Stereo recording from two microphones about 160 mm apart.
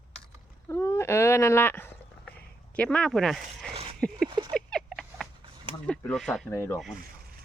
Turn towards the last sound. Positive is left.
turn(degrees=15)  # may be behind; listen again after turning